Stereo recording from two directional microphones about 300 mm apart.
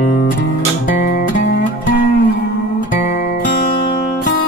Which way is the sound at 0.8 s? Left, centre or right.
Left.